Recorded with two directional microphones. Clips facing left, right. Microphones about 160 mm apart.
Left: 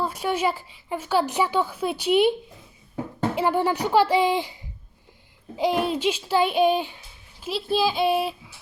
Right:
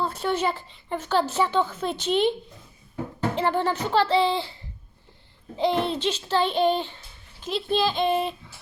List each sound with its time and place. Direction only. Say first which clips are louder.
0.0 s speech: left 1 dB; 10° left (ahead or behind)
3.3 s speech: left 2 dB; 10° left (ahead or behind)
5.5 s speech: left 1 dB; 10° left (ahead or behind)